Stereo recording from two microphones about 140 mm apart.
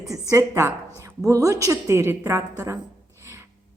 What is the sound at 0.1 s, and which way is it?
A woman's voice, 20° right (ahead or behind).